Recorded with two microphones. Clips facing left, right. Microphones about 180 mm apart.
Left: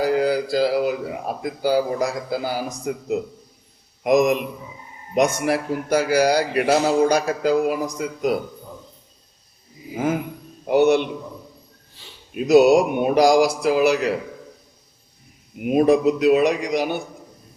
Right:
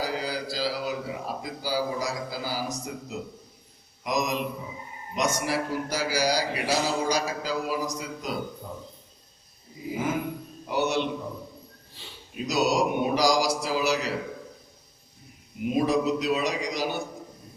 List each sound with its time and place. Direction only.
0.0 s mantra: 55° left (ahead or behind)
1.4 s a man's voice: 55° left (ahead or behind)
10.7 s a man's voice: 55° left (ahead or behind)
12.3 s a man's voice: 60° left (ahead or behind)
15.6 s a man's voice: 60° left (ahead or behind)